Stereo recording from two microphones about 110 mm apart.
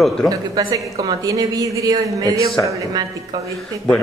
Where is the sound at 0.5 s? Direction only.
35° right (ahead or behind).